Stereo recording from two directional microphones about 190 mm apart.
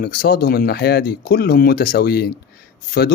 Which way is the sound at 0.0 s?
55° left (ahead or behind).